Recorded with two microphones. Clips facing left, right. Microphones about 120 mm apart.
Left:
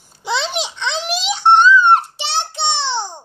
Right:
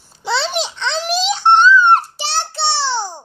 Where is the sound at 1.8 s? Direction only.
20° left (ahead or behind).